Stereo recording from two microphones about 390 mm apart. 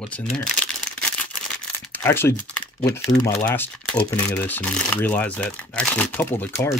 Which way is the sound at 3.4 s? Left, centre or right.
Centre.